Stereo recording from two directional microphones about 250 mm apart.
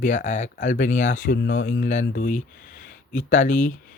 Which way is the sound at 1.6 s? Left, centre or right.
Left.